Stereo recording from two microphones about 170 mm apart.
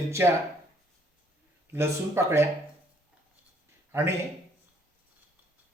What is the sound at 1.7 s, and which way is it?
Speech, 15° right (ahead or behind).